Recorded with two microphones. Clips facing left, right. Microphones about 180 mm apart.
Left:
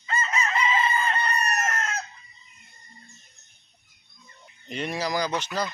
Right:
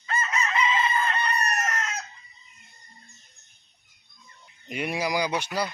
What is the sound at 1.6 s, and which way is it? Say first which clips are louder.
Chicken: left 1 dB; 50° left (ahead or behind).